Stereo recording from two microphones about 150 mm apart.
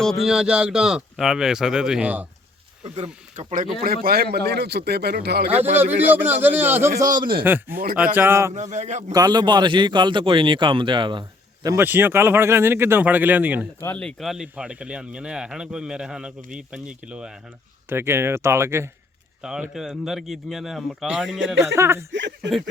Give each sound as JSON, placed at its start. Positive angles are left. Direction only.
{"t": 0.0, "sound": "speech", "side_deg": 0}
{"t": 2.9, "sound": "speech", "side_deg": -50}
{"t": 3.8, "sound": "a man's voice", "side_deg": -85}
{"t": 5.5, "sound": "speech", "side_deg": -45}
{"t": 6.1, "sound": "speech", "side_deg": -10}
{"t": 7.2, "sound": "speech", "side_deg": -35}
{"t": 7.4, "sound": "speech", "side_deg": -15}
{"t": 8.5, "sound": "speech", "side_deg": -50}
{"t": 9.1, "sound": "a man's voice", "side_deg": -25}
{"t": 13.8, "sound": "speech", "side_deg": 10}
{"t": 14.2, "sound": "speech", "side_deg": 0}
{"t": 19.4, "sound": "speech", "side_deg": -5}
{"t": 21.6, "sound": "speech", "side_deg": -20}
{"t": 22.4, "sound": "speech", "side_deg": 0}